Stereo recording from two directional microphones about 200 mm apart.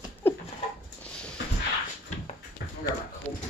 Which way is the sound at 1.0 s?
5° left (ahead or behind).